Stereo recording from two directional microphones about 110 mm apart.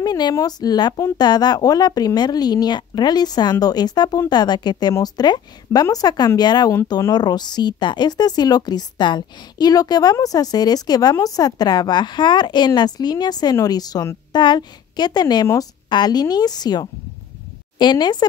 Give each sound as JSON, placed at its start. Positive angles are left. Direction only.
{"t": 0.0, "sound": "a woman's voice", "side_deg": 35}